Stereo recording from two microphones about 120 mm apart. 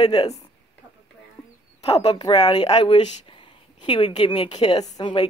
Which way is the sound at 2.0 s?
35° left (ahead or behind).